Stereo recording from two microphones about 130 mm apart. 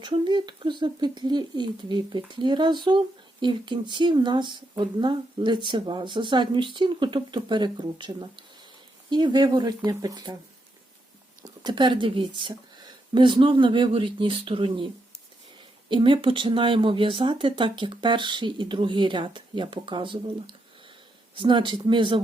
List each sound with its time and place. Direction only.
0.0 s speech: 35° right (ahead or behind)
11.4 s speech: 35° right (ahead or behind)
15.9 s speech: 40° right (ahead or behind)